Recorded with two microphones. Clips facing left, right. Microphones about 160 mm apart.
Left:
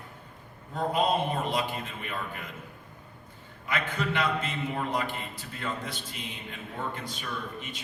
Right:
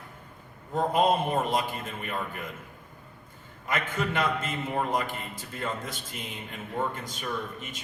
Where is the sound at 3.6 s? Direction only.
45° right (ahead or behind).